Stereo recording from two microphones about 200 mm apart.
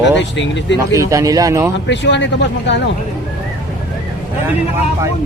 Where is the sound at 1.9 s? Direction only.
65° left (ahead or behind).